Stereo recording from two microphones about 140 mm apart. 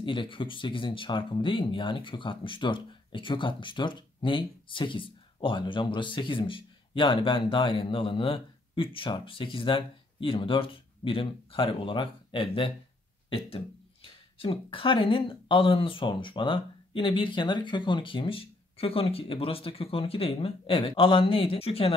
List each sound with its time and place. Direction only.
0.0 s speech: 35° left (ahead or behind)
14.0 s speech: 40° left (ahead or behind)